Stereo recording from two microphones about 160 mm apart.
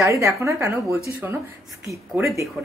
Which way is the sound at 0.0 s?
20° right (ahead or behind).